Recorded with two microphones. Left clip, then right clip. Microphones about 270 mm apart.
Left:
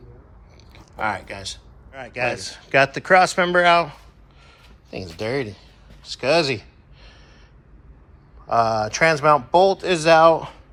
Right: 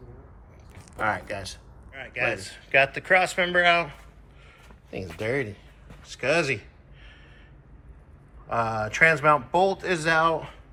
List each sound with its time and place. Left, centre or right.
0.9 s speech: centre
1.9 s speech: centre
8.4 s speech: centre